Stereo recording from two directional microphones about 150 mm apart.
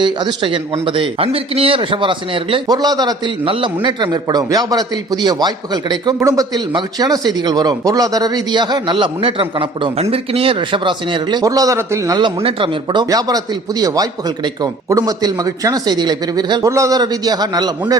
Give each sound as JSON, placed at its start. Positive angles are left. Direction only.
{"t": 0.0, "sound": "speech", "side_deg": -30}